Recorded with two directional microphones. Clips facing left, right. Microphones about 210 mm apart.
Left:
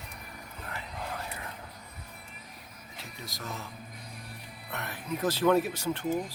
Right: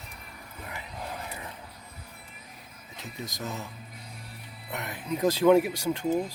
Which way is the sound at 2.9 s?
20° right (ahead or behind).